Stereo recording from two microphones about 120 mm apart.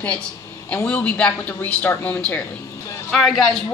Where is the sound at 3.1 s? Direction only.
Centre (ahead or behind).